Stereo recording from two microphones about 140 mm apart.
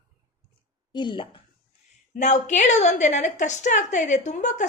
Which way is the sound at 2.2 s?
60° left (ahead or behind).